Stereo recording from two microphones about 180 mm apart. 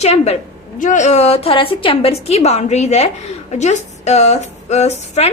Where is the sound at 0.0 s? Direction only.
35° left (ahead or behind).